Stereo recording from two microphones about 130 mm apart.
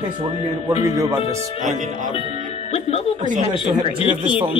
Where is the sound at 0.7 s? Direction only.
25° right (ahead or behind).